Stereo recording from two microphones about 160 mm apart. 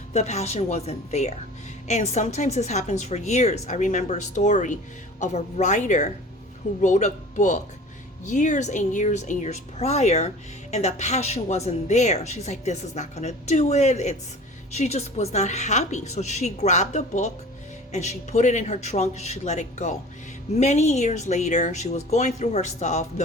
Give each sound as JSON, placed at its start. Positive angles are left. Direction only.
{"t": 0.1, "sound": "a woman's voice", "side_deg": 45}